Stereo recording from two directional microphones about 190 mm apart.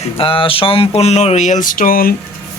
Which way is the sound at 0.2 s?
30° left (ahead or behind).